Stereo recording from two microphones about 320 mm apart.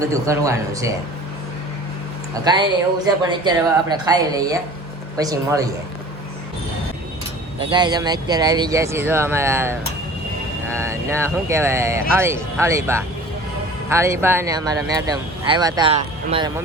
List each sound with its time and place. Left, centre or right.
0.0 s speech: centre
3.2 s speech: centre
7.6 s speech: centre
10.8 s speech: centre